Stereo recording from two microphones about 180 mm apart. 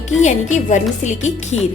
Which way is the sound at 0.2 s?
40° left (ahead or behind).